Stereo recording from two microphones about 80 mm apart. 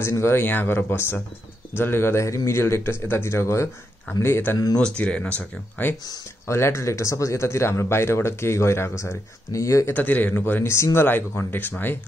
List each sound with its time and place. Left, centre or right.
0.1 s speech: left
4.7 s speech: centre
6.0 s speech: left
9.9 s speech: left